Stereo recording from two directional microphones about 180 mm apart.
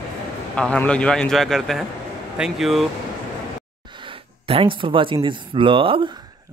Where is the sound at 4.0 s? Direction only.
30° right (ahead or behind).